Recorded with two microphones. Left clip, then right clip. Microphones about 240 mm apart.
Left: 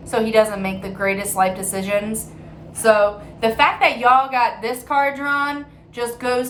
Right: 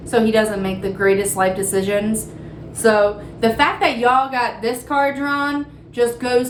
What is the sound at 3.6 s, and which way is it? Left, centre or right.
A woman's voice, centre.